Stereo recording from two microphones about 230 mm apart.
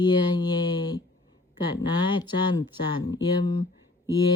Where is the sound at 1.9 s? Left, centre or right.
Centre.